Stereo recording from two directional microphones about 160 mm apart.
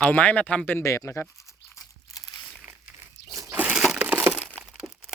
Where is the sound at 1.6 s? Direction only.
90° left.